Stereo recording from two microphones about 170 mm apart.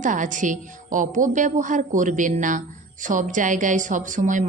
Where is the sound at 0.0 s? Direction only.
50° right (ahead or behind).